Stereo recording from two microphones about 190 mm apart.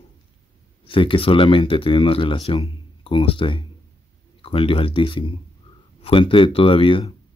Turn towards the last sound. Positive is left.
turn(degrees=30)  # may be behind; listen again after turning